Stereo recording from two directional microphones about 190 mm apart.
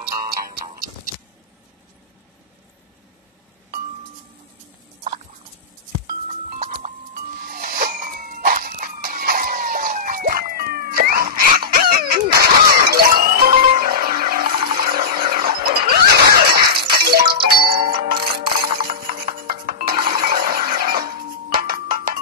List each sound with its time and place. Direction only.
6.2 s music: 40° right (ahead or behind)
14.8 s a sound: 50° right (ahead or behind)
16.9 s music: 55° right (ahead or behind)
17.6 s music: 30° right (ahead or behind)
17.9 s music: 55° right (ahead or behind)